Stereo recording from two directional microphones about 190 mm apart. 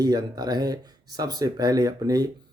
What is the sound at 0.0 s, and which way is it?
Speech, 20° right (ahead or behind).